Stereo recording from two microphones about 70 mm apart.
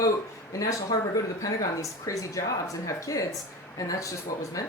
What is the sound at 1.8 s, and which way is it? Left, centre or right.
Speech, left.